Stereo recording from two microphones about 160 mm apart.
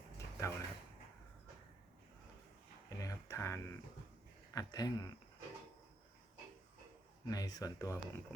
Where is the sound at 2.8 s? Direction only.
20° left (ahead or behind).